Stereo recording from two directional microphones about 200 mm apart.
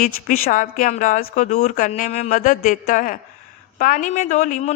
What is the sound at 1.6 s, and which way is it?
Speech, 45° left (ahead or behind).